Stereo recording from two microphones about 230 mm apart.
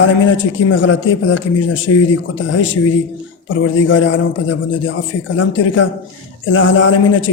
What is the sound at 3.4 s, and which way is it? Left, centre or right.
Speech, left.